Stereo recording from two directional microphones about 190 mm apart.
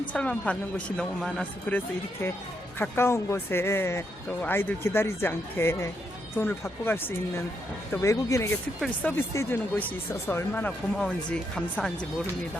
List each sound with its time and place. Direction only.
0.1 s speech: 5° left (ahead or behind)